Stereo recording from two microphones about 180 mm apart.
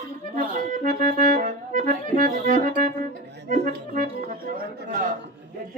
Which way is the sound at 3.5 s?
50° right (ahead or behind).